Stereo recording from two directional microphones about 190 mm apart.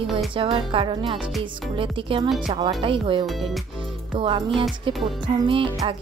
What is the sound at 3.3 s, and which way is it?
Speech, centre (ahead or behind).